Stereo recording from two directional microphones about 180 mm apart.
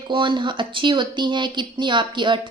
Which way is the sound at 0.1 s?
25° right (ahead or behind).